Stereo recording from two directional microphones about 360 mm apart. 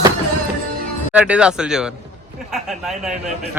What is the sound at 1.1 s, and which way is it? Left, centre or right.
Speech, centre.